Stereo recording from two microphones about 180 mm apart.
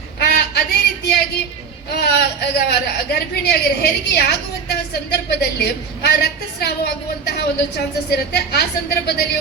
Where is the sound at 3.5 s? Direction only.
65° left (ahead or behind).